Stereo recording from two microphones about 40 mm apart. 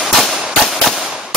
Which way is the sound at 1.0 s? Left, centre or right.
Centre.